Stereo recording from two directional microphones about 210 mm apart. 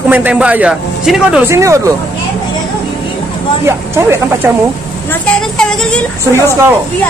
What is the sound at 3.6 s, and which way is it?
Speech, 10° right (ahead or behind).